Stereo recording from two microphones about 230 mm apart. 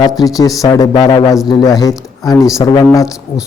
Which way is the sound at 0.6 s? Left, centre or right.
Centre.